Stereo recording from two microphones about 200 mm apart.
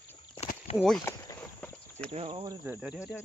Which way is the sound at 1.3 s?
15° left (ahead or behind).